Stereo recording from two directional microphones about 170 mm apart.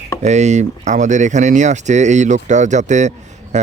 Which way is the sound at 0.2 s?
45° right (ahead or behind).